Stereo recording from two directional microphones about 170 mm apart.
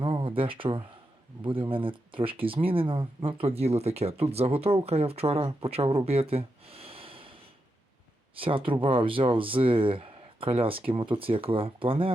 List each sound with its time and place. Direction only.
0.0 s a sound: 30° right (ahead or behind)
1.5 s speech: 30° right (ahead or behind)
6.1 s gasp: 35° right (ahead or behind)
8.4 s speech: 30° right (ahead or behind)